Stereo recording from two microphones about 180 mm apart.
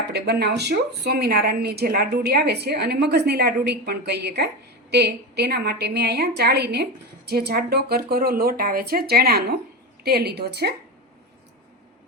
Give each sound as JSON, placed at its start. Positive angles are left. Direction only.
{"t": 0.1, "sound": "a woman's voice", "side_deg": -65}